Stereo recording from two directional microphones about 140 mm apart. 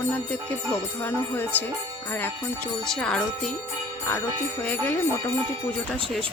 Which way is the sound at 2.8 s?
5° left (ahead or behind).